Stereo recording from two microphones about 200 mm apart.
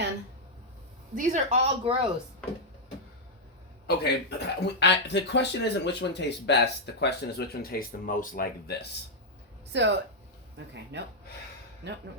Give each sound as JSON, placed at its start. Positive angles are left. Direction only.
{"t": 1.1, "sound": "speech", "side_deg": -40}
{"t": 3.8, "sound": "speech", "side_deg": 55}
{"t": 9.7, "sound": "speech", "side_deg": -60}
{"t": 10.9, "sound": "speech", "side_deg": -60}